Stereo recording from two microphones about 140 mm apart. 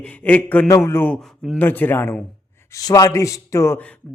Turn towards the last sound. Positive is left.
turn(degrees=15)  # may be behind; listen again after turning